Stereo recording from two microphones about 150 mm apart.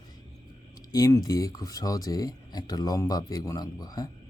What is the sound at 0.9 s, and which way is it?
Speech, 25° left (ahead or behind).